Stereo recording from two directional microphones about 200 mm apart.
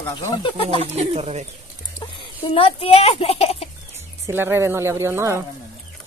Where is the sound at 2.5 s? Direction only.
30° left (ahead or behind).